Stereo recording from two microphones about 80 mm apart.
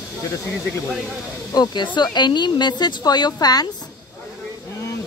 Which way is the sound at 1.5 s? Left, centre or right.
Left.